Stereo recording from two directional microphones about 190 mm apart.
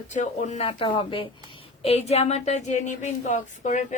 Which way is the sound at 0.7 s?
25° left (ahead or behind).